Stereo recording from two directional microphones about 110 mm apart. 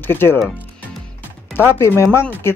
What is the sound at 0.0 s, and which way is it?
Speech, 20° left (ahead or behind).